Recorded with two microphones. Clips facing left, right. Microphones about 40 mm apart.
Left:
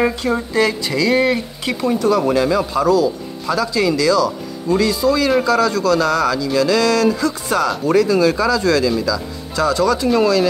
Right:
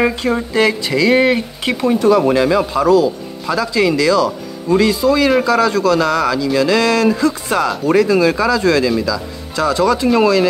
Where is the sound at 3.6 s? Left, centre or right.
Right.